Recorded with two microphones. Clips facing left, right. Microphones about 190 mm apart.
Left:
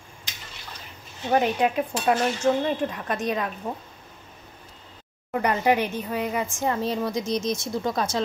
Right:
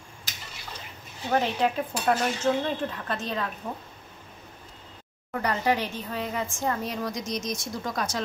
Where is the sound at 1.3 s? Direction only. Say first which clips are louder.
Left 3 dB; 10° left (ahead or behind).